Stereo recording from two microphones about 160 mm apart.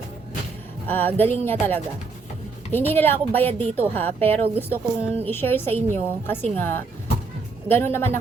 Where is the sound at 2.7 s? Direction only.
15° left (ahead or behind).